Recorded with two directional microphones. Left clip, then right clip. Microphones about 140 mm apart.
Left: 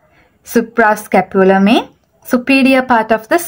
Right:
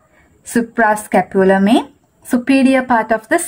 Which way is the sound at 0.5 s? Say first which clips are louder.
Left 3 dB; 25° left (ahead or behind).